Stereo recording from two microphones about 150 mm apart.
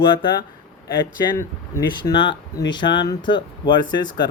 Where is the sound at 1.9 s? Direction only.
30° left (ahead or behind).